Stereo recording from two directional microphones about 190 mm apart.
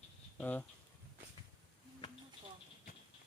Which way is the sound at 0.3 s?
5° left (ahead or behind).